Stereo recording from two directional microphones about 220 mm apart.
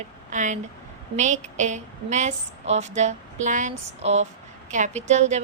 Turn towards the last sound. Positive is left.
turn(degrees=-30)  # may be behind; listen again after turning